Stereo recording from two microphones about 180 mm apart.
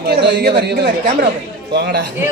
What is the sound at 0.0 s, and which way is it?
A man's voice, 65° right (ahead or behind).